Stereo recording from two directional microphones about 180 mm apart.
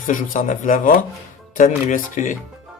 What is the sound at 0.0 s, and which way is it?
Speech, 45° left (ahead or behind).